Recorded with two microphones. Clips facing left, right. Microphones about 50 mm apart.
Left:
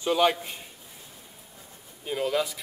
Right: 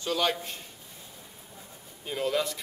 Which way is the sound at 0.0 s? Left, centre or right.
Centre.